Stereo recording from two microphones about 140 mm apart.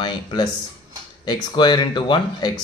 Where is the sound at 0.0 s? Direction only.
30° left (ahead or behind).